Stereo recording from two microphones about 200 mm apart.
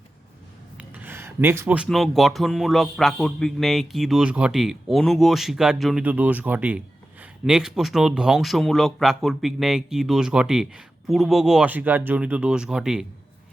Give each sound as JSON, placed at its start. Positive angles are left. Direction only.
{"t": 0.8, "sound": "speech", "side_deg": -10}